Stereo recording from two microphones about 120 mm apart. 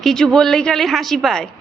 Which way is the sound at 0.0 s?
5° left (ahead or behind).